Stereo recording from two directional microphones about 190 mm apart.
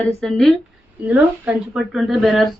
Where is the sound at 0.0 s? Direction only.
Centre (ahead or behind).